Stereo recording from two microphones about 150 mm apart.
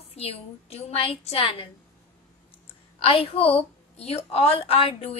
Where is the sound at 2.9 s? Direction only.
40° left (ahead or behind).